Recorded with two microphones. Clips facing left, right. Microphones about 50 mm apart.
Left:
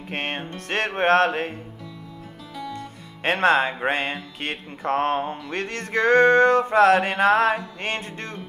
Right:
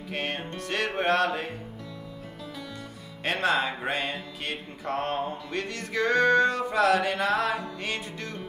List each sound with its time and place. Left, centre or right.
0.1 s music: left
3.3 s mantra: left